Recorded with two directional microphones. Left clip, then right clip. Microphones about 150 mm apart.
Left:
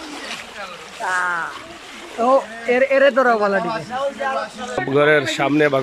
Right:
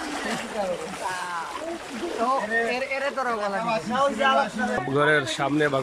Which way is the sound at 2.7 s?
50° left (ahead or behind).